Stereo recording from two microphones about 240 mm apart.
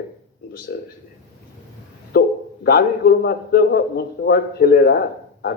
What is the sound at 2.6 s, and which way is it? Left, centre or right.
A man's voice, left.